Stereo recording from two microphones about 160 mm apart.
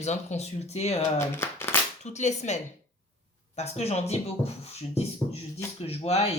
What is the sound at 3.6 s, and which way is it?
Speech, 40° left (ahead or behind).